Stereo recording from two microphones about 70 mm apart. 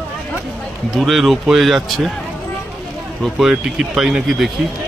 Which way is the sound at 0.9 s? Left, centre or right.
Centre.